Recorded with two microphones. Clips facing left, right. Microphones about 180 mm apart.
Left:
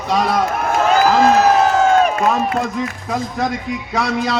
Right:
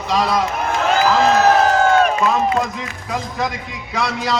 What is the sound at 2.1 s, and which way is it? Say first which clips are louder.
A man's voice: even; 45° left (ahead or behind).